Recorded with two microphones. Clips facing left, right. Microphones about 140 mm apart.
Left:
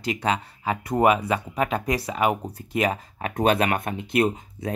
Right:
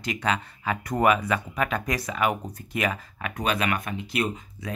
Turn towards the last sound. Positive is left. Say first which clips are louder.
# left 5 dB
turn(degrees=45)  # may be behind; listen again after turning